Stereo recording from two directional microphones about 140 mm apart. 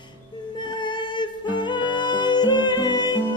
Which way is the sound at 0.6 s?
35° left (ahead or behind).